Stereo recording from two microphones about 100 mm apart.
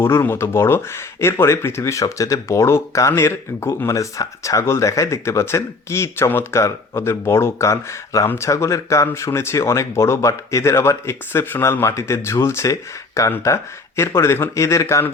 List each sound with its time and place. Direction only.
0.0 s speech: 25° left (ahead or behind)